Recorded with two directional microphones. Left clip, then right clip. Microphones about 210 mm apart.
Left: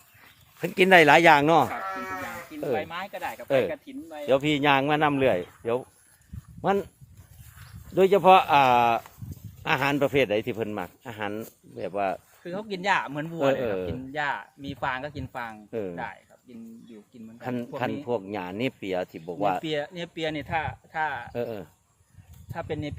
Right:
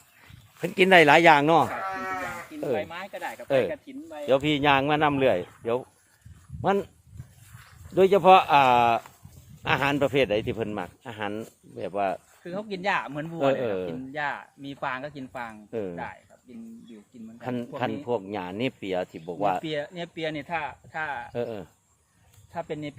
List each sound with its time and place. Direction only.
0.2 s speech: 10° left (ahead or behind)
1.8 s livestock: 20° right (ahead or behind)
2.7 s speech: 40° left (ahead or behind)
4.3 s speech: 5° left (ahead or behind)
7.9 s speech: 5° left (ahead or behind)
12.4 s speech: 50° left (ahead or behind)
13.6 s speech: 5° left (ahead or behind)
14.1 s speech: 45° left (ahead or behind)
15.7 s speech: 5° left (ahead or behind)
16.5 s speech: 50° left (ahead or behind)
17.4 s speech: 5° left (ahead or behind)
19.6 s speech: 50° left (ahead or behind)
21.3 s speech: 5° left (ahead or behind)
22.5 s speech: 50° left (ahead or behind)